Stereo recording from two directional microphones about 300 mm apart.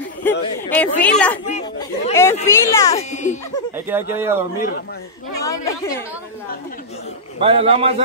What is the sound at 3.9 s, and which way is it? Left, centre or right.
Speech, centre.